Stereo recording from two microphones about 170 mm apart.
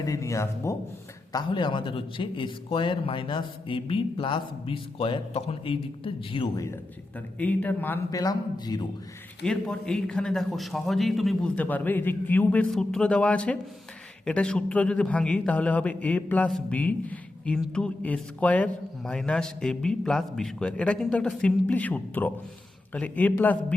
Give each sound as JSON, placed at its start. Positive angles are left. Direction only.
{"t": 0.0, "sound": "a man's voice", "side_deg": 20}
{"t": 7.3, "sound": "a man's voice", "side_deg": 10}
{"t": 9.4, "sound": "a man's voice", "side_deg": 5}